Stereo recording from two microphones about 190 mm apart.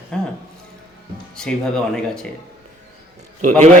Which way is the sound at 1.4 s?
5° left (ahead or behind).